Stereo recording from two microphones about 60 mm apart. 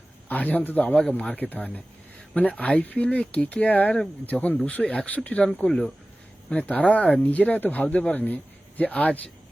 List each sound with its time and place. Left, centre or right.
0.3 s speech: left
1.4 s speech: left
5.6 s speech: centre
6.5 s speech: left